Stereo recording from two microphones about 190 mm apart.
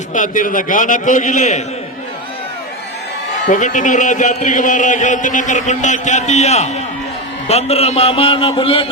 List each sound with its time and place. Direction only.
0.1 s a man's voice: 45° left (ahead or behind)
3.5 s a man's voice: 40° left (ahead or behind)